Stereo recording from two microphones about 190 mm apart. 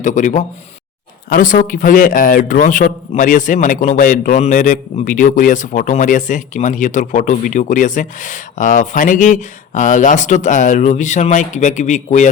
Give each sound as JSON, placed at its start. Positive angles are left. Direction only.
{"t": 0.0, "sound": "speech", "side_deg": 40}